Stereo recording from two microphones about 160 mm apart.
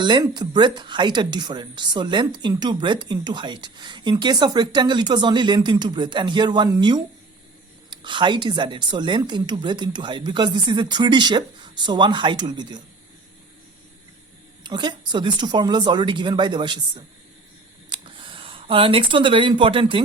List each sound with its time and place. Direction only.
0.0 s speech: 30° right (ahead or behind)
14.6 s speech: 30° right (ahead or behind)